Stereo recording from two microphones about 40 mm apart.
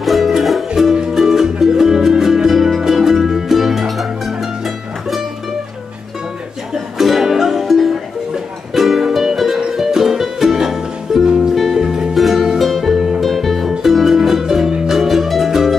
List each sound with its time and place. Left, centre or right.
0.0 s music: centre
6.7 s music: centre